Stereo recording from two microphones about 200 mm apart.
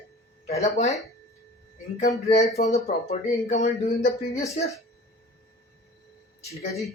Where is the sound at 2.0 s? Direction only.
35° left (ahead or behind).